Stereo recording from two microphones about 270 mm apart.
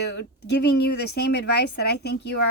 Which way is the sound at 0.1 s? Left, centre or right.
Left.